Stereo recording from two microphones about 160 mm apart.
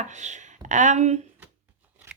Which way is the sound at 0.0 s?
45° right (ahead or behind).